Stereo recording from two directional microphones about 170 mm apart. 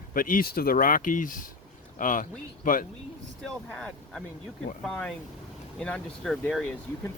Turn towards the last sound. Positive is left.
turn(degrees=5)  # may be behind; listen again after turning